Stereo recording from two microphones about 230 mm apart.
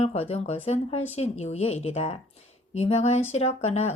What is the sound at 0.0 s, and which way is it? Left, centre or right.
Speech, left.